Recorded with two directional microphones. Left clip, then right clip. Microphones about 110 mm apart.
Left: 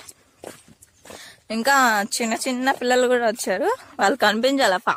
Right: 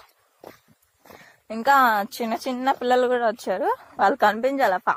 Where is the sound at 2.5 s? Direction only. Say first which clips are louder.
Even; 20° left (ahead or behind).